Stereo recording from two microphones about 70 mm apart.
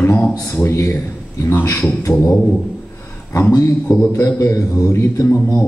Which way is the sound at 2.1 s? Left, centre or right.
Centre.